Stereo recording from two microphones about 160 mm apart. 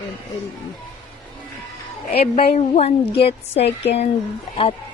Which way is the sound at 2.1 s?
40° left (ahead or behind).